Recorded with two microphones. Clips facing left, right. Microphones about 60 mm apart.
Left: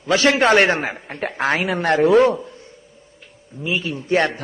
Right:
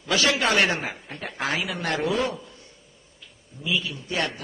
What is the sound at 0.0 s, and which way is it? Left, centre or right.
A man's voice, left.